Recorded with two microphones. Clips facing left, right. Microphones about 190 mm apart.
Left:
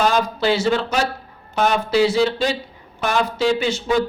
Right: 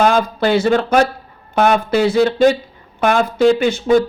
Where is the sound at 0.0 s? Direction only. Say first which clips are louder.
Right 4 dB; 55° right (ahead or behind).